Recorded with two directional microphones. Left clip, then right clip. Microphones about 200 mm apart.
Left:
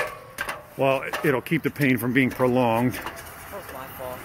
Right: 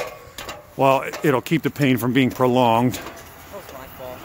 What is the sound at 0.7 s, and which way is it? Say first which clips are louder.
Speech: right 5 dB; 35° right (ahead or behind).